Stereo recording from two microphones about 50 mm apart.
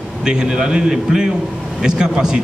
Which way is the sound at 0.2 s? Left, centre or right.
Centre.